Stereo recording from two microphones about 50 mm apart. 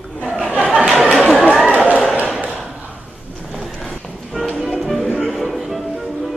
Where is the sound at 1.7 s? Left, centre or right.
Right.